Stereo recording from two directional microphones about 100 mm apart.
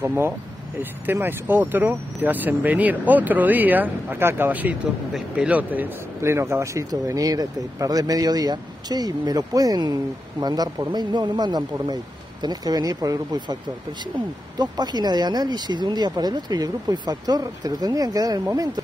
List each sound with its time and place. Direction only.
0.0 s speech: 25° right (ahead or behind); by 13.6 s 40° right (ahead or behind)
14.6 s speech: 45° right (ahead or behind)